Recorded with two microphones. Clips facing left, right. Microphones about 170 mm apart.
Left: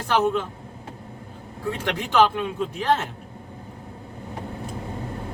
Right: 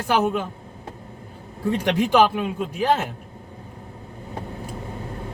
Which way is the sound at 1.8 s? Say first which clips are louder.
Right 2 dB; 10° right (ahead or behind).